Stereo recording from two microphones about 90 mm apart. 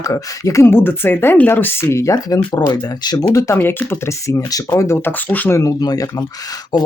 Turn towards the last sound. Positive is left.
turn(degrees=45)  # may be behind; listen again after turning